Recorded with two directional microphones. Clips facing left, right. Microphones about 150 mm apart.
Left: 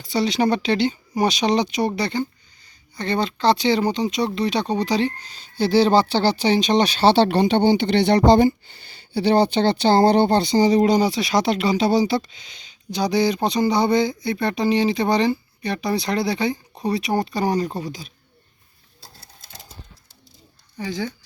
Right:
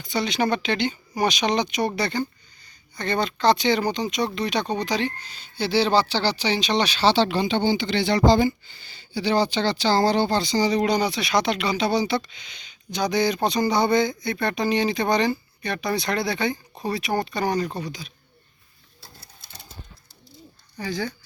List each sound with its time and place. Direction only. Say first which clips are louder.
0.0 s speech: left 4 dB; 35° left (ahead or behind); by 10.8 s 50° left (ahead or behind)
10.8 s speech: left 5 dB; 35° left (ahead or behind)
20.7 s speech: left 1 dB; 20° left (ahead or behind)